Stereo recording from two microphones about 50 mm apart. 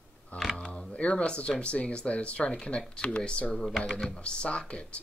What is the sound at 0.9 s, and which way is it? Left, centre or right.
Speech, left.